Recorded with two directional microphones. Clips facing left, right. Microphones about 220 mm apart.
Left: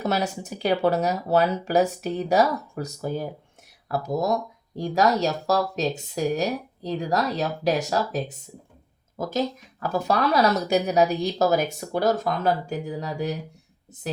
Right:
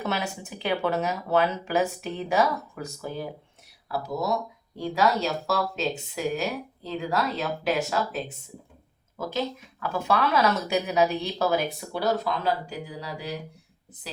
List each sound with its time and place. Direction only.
0.0 s speech: 40° left (ahead or behind)